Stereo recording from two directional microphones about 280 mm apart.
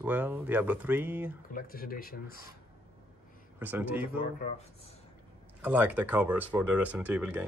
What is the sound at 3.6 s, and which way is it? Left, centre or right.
Speech, centre.